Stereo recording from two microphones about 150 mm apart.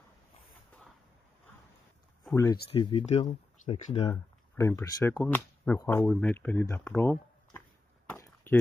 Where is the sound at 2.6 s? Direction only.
35° left (ahead or behind).